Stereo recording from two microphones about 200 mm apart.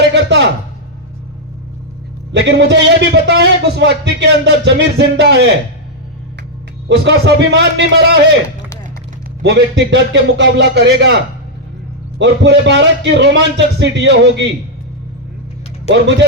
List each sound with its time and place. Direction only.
0.1 s a sound: 60° right (ahead or behind)
2.3 s a man's voice: 60° right (ahead or behind)
6.8 s a man's voice: 60° right (ahead or behind)
9.4 s a man's voice: 60° right (ahead or behind)
12.2 s a man's voice: 60° right (ahead or behind)